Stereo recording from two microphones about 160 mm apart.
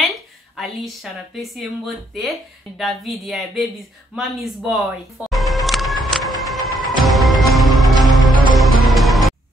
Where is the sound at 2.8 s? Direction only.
Centre (ahead or behind).